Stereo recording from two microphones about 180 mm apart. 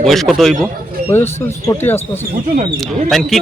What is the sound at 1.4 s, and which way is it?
Speech, 15° left (ahead or behind).